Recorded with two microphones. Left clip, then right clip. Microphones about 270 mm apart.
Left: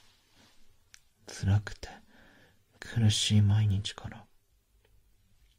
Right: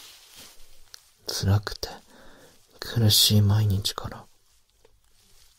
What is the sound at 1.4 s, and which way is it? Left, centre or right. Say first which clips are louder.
Speech: right 4 dB; centre.